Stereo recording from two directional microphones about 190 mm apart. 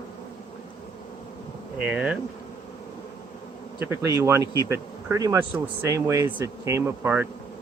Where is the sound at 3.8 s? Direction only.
15° right (ahead or behind).